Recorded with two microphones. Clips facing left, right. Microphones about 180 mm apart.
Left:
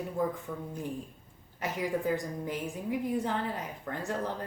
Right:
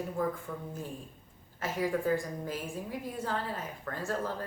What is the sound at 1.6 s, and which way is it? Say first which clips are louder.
A woman's voice: even; 15° left (ahead or behind).